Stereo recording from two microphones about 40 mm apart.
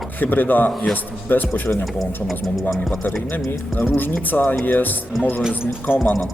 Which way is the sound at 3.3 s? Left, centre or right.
Left.